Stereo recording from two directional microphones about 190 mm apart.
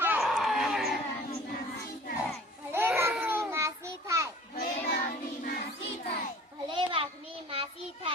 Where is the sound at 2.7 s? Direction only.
10° right (ahead or behind).